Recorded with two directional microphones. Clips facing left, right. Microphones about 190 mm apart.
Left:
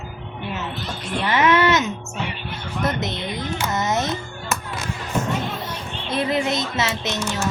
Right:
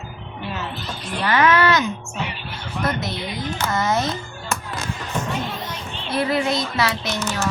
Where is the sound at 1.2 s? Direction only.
20° left (ahead or behind).